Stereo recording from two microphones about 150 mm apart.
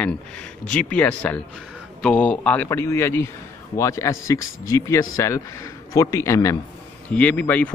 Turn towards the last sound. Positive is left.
turn(degrees=10)  # may be behind; listen again after turning